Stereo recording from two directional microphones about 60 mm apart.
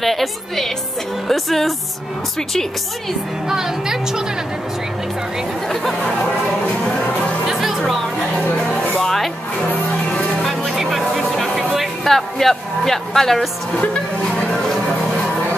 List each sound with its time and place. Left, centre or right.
0.0 s a woman's voice: centre
3.4 s speech: centre
5.7 s a woman's voice: centre
7.4 s music: centre
9.0 s music: centre
9.7 s music: centre
10.4 s music: centre
14.5 s music: centre